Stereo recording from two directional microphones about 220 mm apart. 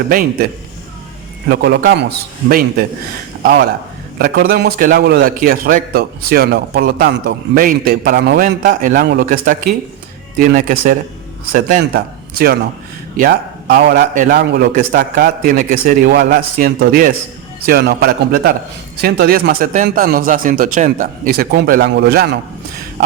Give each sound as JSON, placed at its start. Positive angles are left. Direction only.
{"t": 0.1, "sound": "a man's voice", "side_deg": -40}